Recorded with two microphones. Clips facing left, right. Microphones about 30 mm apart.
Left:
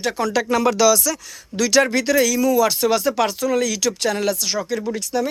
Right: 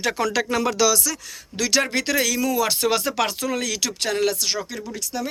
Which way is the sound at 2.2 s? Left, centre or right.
Right.